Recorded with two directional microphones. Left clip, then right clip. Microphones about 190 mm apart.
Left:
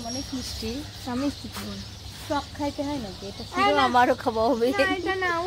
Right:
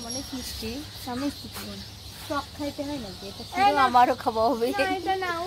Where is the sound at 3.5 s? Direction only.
30° left (ahead or behind).